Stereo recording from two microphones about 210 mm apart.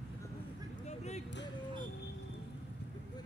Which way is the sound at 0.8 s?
35° left (ahead or behind).